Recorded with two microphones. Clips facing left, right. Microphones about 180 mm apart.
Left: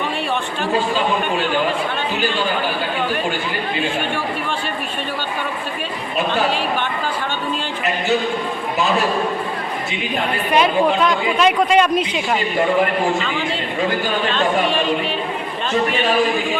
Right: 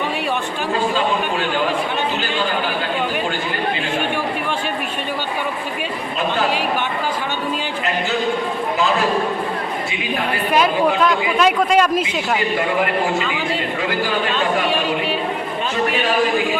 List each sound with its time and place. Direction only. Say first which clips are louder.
10.5 s a man's voice: left 1 dB; centre (ahead or behind)